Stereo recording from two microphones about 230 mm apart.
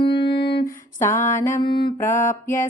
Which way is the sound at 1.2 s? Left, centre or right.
Centre.